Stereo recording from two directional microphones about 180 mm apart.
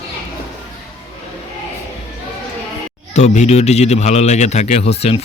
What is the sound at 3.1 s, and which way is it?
A man's voice, 40° left (ahead or behind).